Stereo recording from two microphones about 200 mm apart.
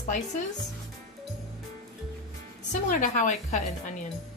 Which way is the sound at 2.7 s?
40° left (ahead or behind).